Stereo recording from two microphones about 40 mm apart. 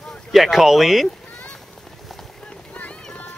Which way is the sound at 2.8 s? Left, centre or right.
Left.